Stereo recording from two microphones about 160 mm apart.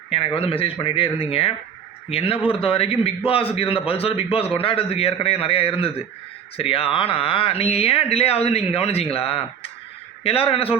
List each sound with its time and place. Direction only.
0.3 s speech: 35° left (ahead or behind)